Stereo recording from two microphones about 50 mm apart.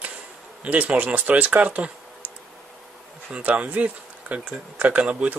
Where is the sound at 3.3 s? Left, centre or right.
Right.